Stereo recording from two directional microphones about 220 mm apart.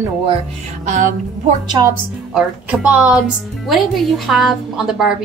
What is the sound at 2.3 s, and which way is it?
Speech, 5° right (ahead or behind).